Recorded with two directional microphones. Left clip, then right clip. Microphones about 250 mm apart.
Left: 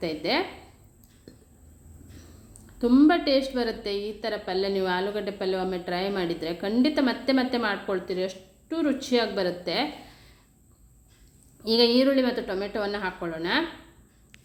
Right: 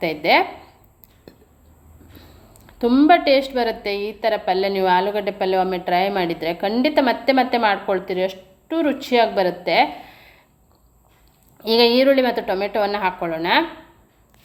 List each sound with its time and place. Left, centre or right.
0.0 s a woman's voice: centre
2.7 s a woman's voice: centre
11.6 s a woman's voice: centre